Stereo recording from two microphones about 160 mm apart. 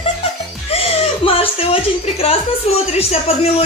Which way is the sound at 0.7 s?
40° left (ahead or behind).